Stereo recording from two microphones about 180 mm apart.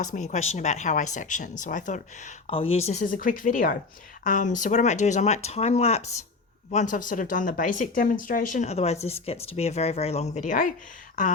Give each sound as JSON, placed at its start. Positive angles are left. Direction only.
{"t": 0.0, "sound": "speech", "side_deg": 45}